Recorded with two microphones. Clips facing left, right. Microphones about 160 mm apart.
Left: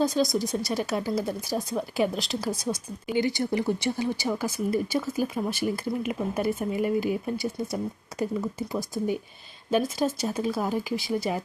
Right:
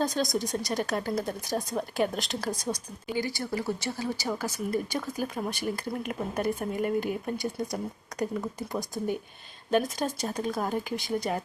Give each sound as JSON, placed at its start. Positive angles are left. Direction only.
{"t": 0.0, "sound": "speech", "side_deg": 0}
{"t": 3.2, "sound": "speech", "side_deg": 20}
{"t": 8.5, "sound": "speech", "side_deg": 5}